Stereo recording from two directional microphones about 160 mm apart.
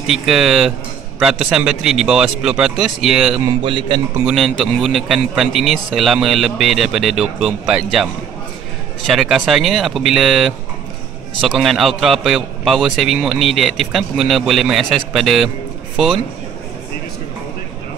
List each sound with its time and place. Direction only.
0.0 s a man's voice: 5° right (ahead or behind)
3.4 s a man's voice: 30° right (ahead or behind)
4.3 s a man's voice: centre (ahead or behind)